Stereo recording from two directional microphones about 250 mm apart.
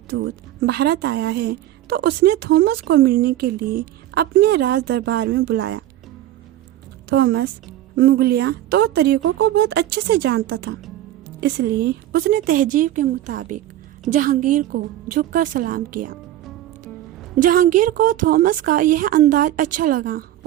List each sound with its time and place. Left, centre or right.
0.1 s a woman's voice: right
7.1 s a woman's voice: right
17.3 s a woman's voice: right